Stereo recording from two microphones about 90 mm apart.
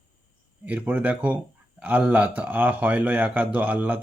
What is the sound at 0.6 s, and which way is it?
Speech, 15° right (ahead or behind).